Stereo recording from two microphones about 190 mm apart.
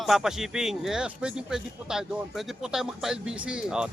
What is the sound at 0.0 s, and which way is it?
A man's voice, centre (ahead or behind).